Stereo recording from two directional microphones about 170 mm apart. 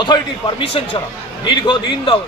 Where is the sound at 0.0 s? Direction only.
30° left (ahead or behind).